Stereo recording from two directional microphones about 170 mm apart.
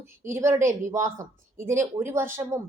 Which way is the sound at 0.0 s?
15° right (ahead or behind).